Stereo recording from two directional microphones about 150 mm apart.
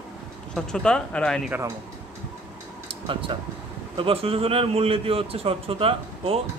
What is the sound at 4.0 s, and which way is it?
A man's voice, 40° right (ahead or behind).